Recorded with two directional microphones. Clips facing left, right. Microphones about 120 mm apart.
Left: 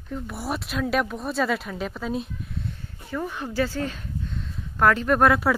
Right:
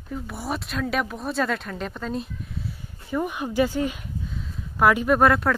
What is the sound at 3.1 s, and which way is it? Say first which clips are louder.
Speech: right 3 dB; 15° right (ahead or behind).